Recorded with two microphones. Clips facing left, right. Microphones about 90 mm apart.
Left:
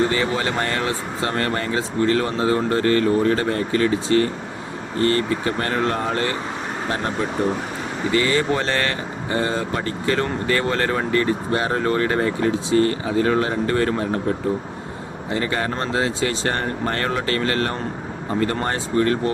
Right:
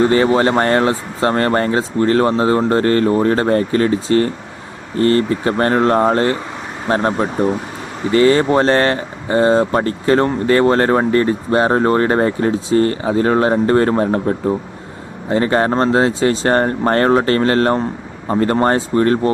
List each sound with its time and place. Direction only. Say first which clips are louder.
0.0 s speech: right 8 dB; 40° right (ahead or behind)